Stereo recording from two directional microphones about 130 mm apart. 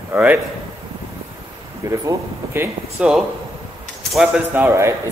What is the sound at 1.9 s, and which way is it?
Speech, 20° right (ahead or behind).